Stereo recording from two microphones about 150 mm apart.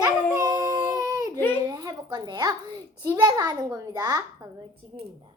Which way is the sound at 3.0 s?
25° right (ahead or behind).